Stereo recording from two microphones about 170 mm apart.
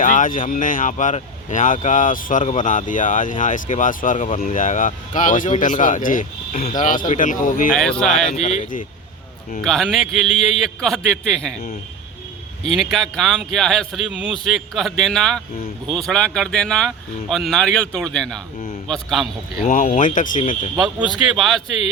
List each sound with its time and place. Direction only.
0.0 s speech: 50° left (ahead or behind)
7.8 s speech: 5° left (ahead or behind)
8.3 s speech: 40° left (ahead or behind)
9.6 s speech: centre (ahead or behind)
12.7 s speech: centre (ahead or behind)
19.7 s speech: 55° left (ahead or behind)
21.3 s speech: centre (ahead or behind)